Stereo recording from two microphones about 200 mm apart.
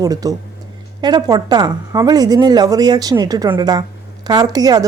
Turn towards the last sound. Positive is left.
turn(degrees=-20)  # may be behind; listen again after turning